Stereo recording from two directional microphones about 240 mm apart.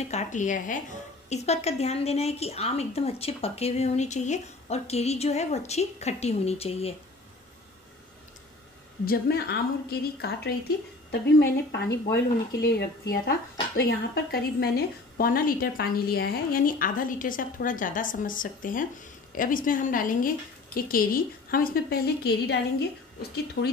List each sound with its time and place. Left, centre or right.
0.0 s a woman's voice: left
9.0 s a woman's voice: left